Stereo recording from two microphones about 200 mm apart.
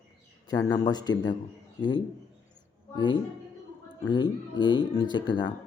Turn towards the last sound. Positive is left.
turn(degrees=20)  # may be behind; listen again after turning